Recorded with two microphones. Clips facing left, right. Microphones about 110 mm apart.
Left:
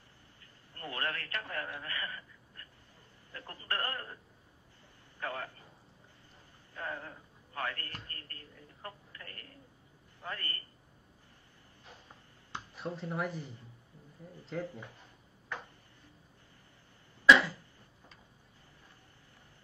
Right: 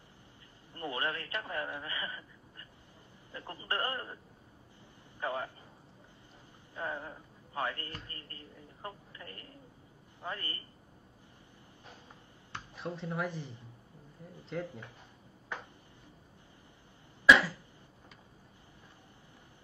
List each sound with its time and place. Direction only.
0.7 s speech: 20° right (ahead or behind)
5.2 s speech: 20° right (ahead or behind)
6.7 s a man's voice: 15° right (ahead or behind)
12.7 s speech: centre (ahead or behind)
17.3 s cough: 5° right (ahead or behind)